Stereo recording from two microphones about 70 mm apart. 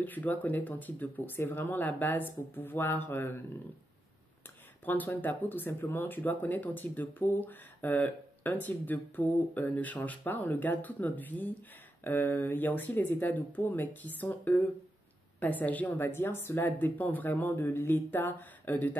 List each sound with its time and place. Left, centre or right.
0.0 s speech: left
4.8 s speech: left
16.0 s speech: left